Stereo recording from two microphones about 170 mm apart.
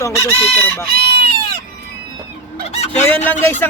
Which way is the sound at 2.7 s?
40° left (ahead or behind).